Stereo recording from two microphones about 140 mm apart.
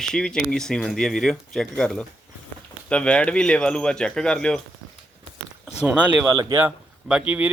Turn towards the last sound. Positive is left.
turn(degrees=-10)  # may be behind; listen again after turning